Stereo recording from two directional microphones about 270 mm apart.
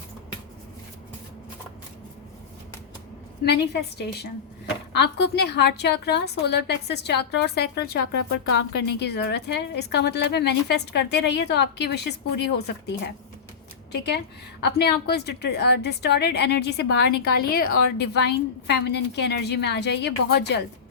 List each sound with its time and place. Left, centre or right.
3.4 s a woman's voice: left
13.9 s a woman's voice: left
17.1 s a woman's voice: left
17.4 s a woman's voice: left